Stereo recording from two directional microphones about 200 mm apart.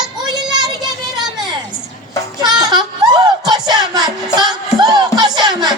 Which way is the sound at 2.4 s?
20° right (ahead or behind).